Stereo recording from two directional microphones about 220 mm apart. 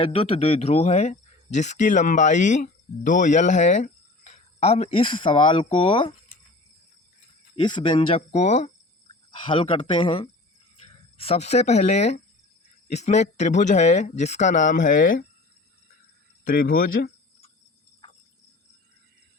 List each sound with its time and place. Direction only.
0.0 s speech: 25° left (ahead or behind)
7.5 s speech: 25° left (ahead or behind); by 15.3 s 40° left (ahead or behind)
16.4 s speech: 40° left (ahead or behind)